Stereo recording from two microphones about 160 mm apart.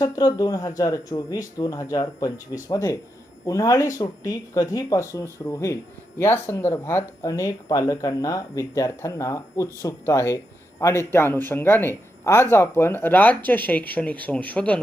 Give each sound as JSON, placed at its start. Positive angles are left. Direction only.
{"t": 0.0, "sound": "speech", "side_deg": 25}